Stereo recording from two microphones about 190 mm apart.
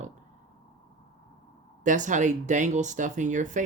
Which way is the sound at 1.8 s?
40° right (ahead or behind).